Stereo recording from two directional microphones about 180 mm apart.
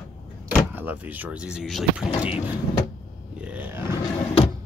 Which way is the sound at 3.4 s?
10° right (ahead or behind).